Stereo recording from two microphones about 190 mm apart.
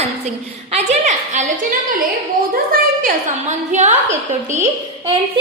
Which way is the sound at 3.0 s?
40° right (ahead or behind).